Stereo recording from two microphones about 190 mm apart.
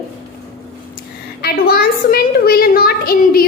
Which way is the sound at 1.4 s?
50° left (ahead or behind).